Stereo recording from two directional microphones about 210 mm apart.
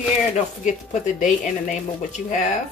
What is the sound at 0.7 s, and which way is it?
Speech, 35° left (ahead or behind).